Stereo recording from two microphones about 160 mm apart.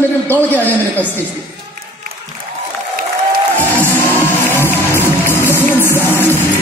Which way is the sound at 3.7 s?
10° left (ahead or behind).